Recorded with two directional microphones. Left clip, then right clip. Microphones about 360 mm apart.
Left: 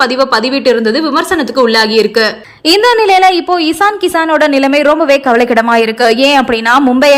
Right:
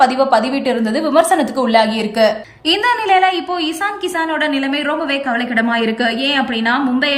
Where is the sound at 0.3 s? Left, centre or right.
Centre.